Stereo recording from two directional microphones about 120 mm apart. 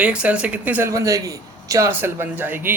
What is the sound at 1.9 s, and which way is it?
Speech, 15° right (ahead or behind).